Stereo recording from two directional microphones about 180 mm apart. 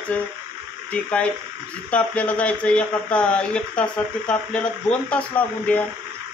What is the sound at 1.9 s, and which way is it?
Speech, 10° left (ahead or behind).